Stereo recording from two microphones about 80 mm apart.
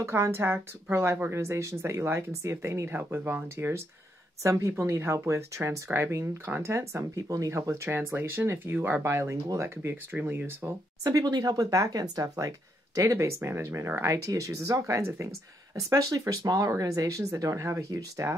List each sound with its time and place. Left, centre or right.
0.0 s speech: right
11.1 s speech: right